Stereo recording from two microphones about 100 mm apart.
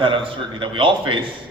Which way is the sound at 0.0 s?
60° right (ahead or behind).